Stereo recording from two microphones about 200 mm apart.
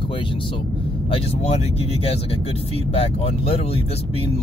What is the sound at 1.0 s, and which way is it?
Speech, 30° left (ahead or behind).